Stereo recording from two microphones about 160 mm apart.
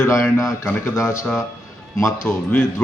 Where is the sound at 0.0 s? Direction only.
20° left (ahead or behind).